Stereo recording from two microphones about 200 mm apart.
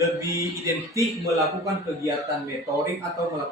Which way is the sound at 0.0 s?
15° right (ahead or behind).